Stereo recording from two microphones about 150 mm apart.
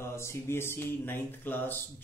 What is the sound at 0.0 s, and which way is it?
A man's voice, 20° left (ahead or behind).